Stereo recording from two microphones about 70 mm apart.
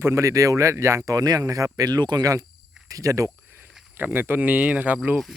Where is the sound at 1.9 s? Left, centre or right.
Right.